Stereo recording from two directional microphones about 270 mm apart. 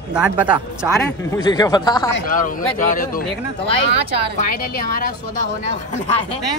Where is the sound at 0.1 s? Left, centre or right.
Centre.